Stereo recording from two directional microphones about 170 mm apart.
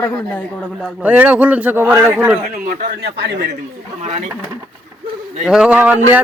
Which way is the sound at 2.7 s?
65° right (ahead or behind).